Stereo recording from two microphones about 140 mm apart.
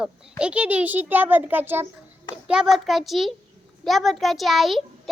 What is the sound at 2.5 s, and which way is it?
A woman's voice, 5° right (ahead or behind).